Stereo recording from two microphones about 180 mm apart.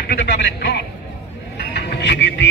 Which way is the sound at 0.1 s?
75° left (ahead or behind).